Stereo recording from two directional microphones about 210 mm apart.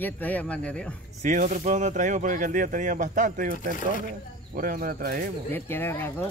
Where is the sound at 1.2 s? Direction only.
35° right (ahead or behind).